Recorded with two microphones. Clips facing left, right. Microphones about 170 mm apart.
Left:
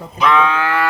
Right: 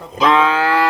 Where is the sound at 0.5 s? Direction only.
35° right (ahead or behind).